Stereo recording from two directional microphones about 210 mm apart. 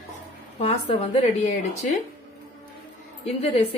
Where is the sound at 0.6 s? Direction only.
30° left (ahead or behind).